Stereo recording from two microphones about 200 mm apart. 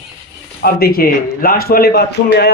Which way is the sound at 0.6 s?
50° left (ahead or behind).